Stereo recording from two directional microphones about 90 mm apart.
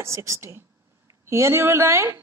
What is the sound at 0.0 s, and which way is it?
A woman's voice, 35° right (ahead or behind).